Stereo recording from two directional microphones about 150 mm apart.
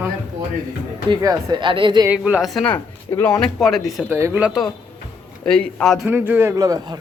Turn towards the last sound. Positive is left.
turn(degrees=-25)  # may be behind; listen again after turning